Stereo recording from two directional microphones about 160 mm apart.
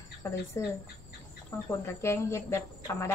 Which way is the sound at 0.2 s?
20° left (ahead or behind).